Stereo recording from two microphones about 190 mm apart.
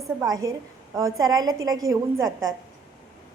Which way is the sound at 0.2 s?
15° right (ahead or behind).